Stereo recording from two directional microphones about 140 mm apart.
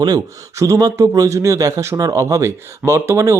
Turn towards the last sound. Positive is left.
turn(degrees=-20)  # may be behind; listen again after turning